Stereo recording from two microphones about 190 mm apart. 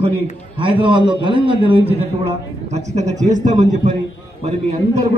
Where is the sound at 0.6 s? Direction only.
25° right (ahead or behind).